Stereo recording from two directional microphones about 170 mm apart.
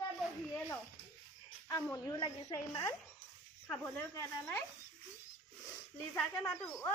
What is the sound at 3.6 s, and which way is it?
Speech, 5° left (ahead or behind).